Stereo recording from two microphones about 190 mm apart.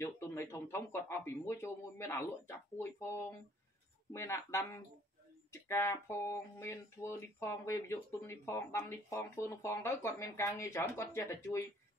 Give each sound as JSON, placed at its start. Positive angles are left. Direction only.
{"t": 0.0, "sound": "speech", "side_deg": 15}